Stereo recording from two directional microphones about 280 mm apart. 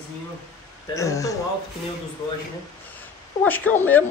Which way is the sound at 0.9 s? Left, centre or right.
Centre.